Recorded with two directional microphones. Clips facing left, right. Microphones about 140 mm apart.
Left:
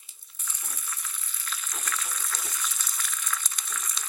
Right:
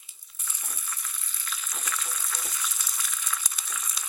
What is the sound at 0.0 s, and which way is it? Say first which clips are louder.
Crushing: even; centre (ahead or behind).